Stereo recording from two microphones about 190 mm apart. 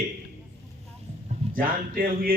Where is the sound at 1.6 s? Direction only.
50° right (ahead or behind).